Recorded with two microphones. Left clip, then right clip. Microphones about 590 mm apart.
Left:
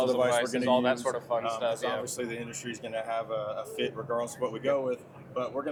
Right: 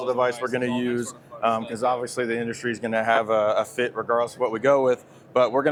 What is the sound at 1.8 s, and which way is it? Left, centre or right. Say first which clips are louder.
Speech: right 8 dB; right.